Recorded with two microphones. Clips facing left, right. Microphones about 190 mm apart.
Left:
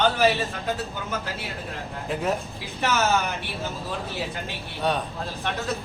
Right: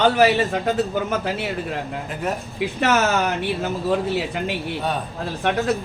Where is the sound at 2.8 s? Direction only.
70° right (ahead or behind).